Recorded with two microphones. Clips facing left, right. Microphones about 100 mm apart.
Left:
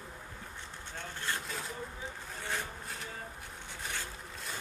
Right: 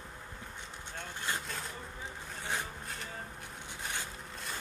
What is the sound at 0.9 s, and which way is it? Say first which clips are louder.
Vehicle: even; 15° right (ahead or behind).